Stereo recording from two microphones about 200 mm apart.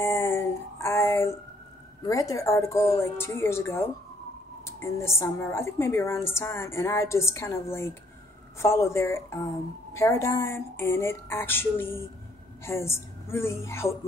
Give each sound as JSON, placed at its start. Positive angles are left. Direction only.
{"t": 0.0, "sound": "a sound", "side_deg": 10}
{"t": 2.0, "sound": "a woman's voice", "side_deg": 15}
{"t": 8.5, "sound": "a woman's voice", "side_deg": 15}